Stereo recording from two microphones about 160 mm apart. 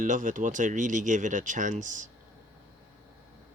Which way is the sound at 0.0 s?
55° right (ahead or behind).